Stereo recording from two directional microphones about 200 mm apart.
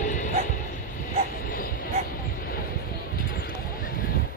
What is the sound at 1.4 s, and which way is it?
Vehicle, 45° left (ahead or behind).